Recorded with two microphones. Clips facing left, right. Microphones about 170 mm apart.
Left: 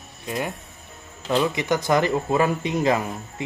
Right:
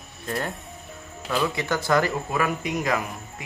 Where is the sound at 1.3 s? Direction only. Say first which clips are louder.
Left 4 dB; 20° left (ahead or behind).